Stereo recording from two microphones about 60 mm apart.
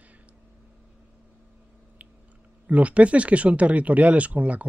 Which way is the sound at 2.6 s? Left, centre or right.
Right.